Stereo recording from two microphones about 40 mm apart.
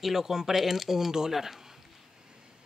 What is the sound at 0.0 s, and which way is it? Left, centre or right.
Speech, centre.